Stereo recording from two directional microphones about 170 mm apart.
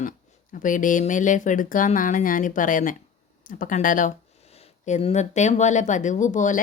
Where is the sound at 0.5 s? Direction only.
50° left (ahead or behind).